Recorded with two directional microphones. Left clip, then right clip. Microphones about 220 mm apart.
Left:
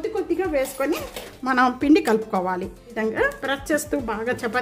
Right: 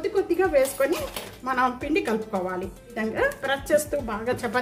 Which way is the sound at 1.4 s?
45° left (ahead or behind).